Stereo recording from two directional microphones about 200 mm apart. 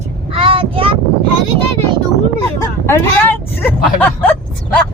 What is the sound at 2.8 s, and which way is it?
Vehicle, 10° left (ahead or behind).